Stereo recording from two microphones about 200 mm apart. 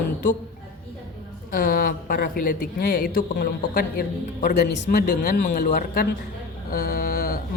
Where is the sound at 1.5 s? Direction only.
45° left (ahead or behind).